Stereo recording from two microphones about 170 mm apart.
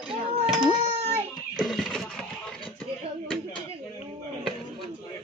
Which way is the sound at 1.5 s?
Centre (ahead or behind).